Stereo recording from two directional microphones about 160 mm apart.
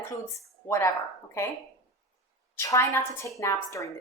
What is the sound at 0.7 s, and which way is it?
Speech, 20° left (ahead or behind).